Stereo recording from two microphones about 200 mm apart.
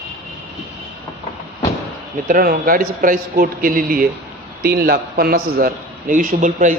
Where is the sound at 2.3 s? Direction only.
45° right (ahead or behind).